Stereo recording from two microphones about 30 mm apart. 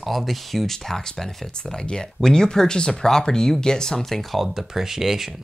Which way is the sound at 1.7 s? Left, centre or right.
Left.